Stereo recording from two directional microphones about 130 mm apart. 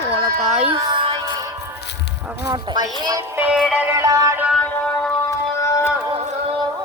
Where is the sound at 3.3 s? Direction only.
10° right (ahead or behind).